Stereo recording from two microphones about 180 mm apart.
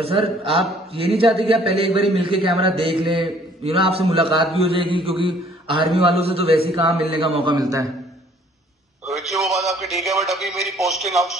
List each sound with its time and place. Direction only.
0.0 s a man's voice: 30° right (ahead or behind)
9.0 s a man's voice: centre (ahead or behind)